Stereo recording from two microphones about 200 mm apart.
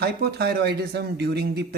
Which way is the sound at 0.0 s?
50° right (ahead or behind).